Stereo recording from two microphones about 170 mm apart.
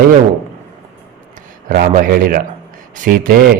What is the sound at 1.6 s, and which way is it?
Speech, 55° right (ahead or behind).